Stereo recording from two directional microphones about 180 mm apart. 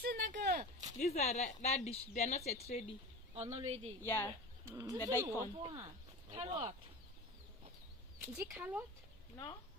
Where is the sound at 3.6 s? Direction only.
30° right (ahead or behind).